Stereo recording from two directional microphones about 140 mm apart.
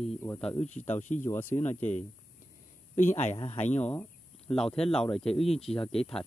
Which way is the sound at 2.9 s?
60° left (ahead or behind).